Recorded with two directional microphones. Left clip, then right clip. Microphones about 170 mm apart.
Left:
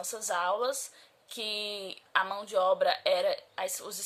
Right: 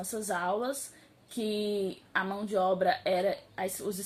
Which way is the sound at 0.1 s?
25° left (ahead or behind).